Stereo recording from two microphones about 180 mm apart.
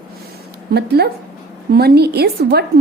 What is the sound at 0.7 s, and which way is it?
A woman's voice, 65° right (ahead or behind).